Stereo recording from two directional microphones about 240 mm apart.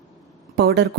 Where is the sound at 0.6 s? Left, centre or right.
Right.